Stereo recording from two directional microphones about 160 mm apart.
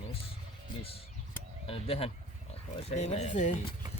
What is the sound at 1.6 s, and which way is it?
Speech, 35° left (ahead or behind).